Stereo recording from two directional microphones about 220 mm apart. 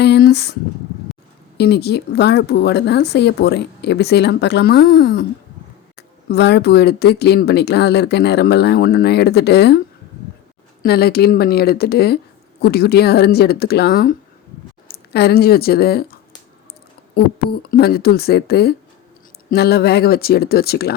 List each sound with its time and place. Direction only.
0.0 s speech: 50° left (ahead or behind)
1.5 s speech: 50° left (ahead or behind)
10.8 s speech: 45° left (ahead or behind)
17.2 s speech: 45° left (ahead or behind)